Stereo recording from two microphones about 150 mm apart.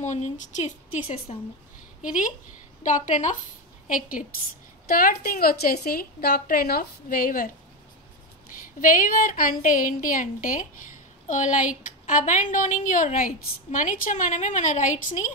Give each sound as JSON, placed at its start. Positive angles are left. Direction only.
{"t": 0.0, "sound": "a woman's voice", "side_deg": 50}
{"t": 2.8, "sound": "a woman's voice", "side_deg": 55}
{"t": 8.8, "sound": "a woman's voice", "side_deg": 65}